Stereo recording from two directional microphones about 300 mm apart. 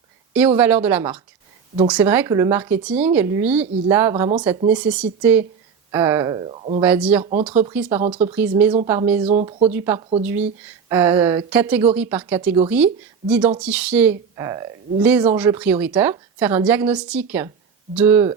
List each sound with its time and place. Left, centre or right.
0.3 s speech: centre
6.8 s speech: centre
9.2 s speech: centre
9.6 s speech: centre